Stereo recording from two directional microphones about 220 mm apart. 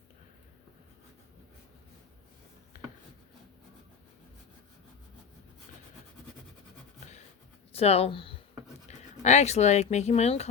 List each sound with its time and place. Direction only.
7.7 s speech: 25° left (ahead or behind)